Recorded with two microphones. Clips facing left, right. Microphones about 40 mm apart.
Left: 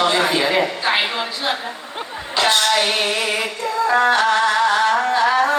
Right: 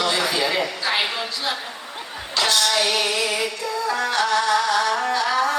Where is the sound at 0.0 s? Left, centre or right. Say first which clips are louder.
Left 4 dB; left.